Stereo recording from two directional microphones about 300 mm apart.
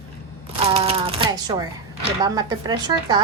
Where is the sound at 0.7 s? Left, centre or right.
Centre.